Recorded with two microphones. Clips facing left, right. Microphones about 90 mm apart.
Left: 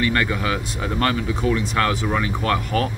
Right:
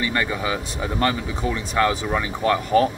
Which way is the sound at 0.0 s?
15° right (ahead or behind).